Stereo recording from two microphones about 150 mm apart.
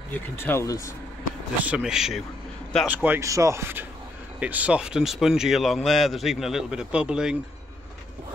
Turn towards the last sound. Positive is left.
turn(degrees=-5)  # may be behind; listen again after turning